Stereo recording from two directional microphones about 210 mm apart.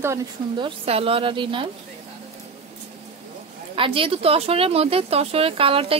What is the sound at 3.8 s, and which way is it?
Speech, 25° right (ahead or behind).